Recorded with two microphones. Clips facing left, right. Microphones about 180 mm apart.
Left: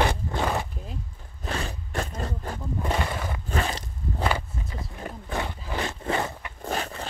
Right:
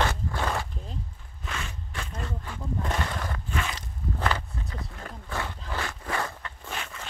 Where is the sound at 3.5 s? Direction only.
35° left (ahead or behind).